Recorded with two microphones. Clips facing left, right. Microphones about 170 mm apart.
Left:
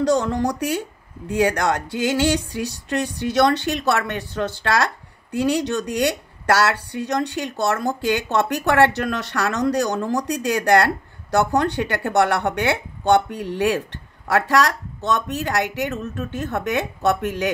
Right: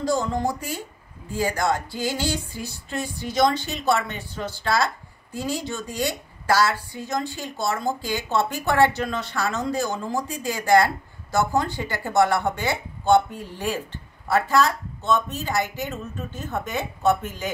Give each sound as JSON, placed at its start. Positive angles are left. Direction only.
{"t": 0.1, "sound": "speech", "side_deg": 75}